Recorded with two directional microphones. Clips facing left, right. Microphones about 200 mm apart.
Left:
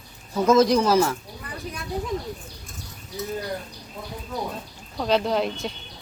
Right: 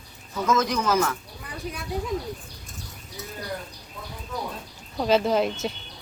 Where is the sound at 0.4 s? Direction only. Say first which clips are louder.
Left 6 dB; 35° left (ahead or behind).